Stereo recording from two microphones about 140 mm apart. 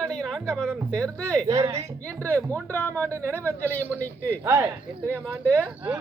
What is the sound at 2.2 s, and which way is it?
Speech, 10° left (ahead or behind).